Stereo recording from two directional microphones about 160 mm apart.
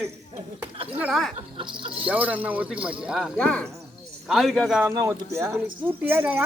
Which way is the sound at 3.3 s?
5° left (ahead or behind).